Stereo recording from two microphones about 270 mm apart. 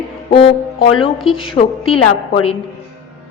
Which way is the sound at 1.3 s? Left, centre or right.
Centre.